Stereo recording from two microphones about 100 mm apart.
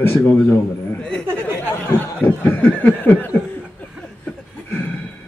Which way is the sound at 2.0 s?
20° left (ahead or behind).